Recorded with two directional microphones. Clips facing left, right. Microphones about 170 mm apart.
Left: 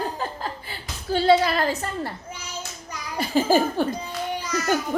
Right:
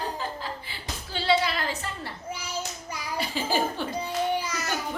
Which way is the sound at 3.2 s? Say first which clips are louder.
Left 8 dB; 45° left (ahead or behind).